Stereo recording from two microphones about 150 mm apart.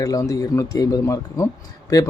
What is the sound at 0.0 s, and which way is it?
Speech, 25° left (ahead or behind).